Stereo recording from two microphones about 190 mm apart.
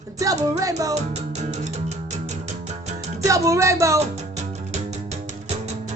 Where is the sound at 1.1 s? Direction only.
35° right (ahead or behind).